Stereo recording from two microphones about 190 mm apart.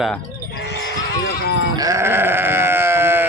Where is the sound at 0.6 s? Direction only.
65° left (ahead or behind).